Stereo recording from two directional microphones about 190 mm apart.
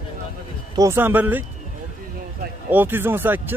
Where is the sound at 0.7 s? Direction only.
15° right (ahead or behind).